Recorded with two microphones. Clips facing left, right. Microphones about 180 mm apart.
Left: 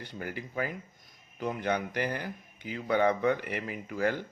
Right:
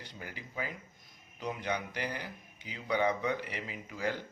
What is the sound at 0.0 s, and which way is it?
Speech, 55° left (ahead or behind).